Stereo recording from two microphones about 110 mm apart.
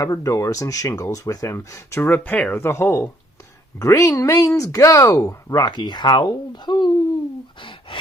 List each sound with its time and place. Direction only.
0.0 s speech: 30° left (ahead or behind)
7.6 s gasp: 55° left (ahead or behind)